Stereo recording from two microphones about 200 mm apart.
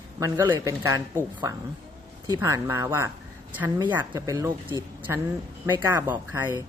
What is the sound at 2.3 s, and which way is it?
Speech, 15° right (ahead or behind).